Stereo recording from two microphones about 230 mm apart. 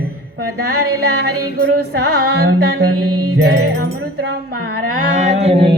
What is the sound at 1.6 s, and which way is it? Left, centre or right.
Music, right.